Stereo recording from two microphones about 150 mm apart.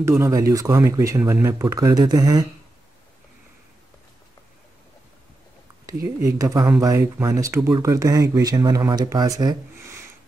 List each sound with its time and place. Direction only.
0.2 s speech: 20° right (ahead or behind)
6.2 s speech: 20° right (ahead or behind)